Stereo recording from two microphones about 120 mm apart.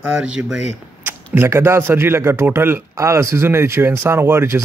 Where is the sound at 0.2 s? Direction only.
5° right (ahead or behind).